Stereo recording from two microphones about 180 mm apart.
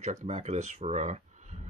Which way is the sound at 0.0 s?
40° right (ahead or behind).